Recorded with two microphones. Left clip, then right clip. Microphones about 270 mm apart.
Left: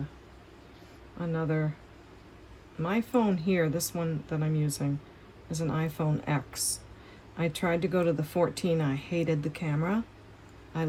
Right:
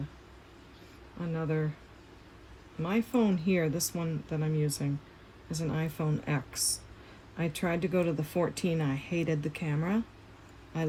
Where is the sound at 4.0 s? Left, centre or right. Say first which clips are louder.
Left 3 dB; centre.